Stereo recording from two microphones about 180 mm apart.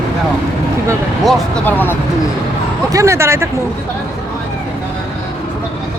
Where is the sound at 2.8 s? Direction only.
15° right (ahead or behind).